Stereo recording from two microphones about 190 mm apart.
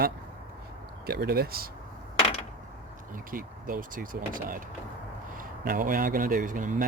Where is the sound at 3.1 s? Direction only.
45° right (ahead or behind).